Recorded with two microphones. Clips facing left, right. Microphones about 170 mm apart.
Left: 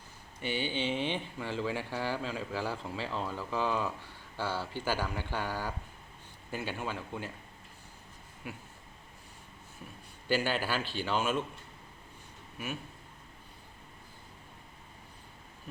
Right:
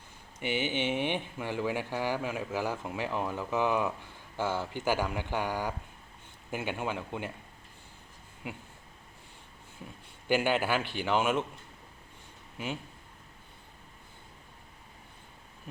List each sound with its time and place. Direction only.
0.4 s speech: 20° right (ahead or behind)
10.2 s speech: 15° right (ahead or behind)